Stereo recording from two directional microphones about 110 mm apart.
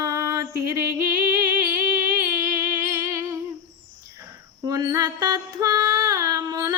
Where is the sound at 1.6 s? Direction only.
20° right (ahead or behind).